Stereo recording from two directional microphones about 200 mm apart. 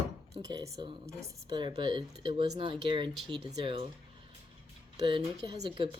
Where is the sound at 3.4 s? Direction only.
25° right (ahead or behind).